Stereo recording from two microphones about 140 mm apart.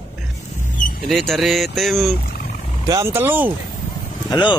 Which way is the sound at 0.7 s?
70° left (ahead or behind).